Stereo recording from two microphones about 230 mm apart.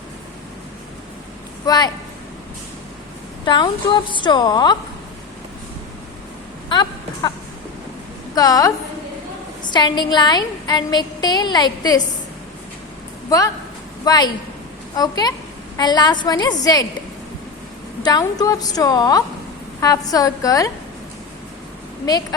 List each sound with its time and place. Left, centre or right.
1.6 s speech: centre
3.4 s a woman's voice: centre
6.7 s speech: centre
8.4 s a woman's voice: centre
14.0 s a woman's voice: centre
18.0 s a woman's voice: centre